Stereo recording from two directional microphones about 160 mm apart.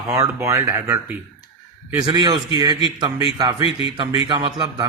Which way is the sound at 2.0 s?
25° right (ahead or behind).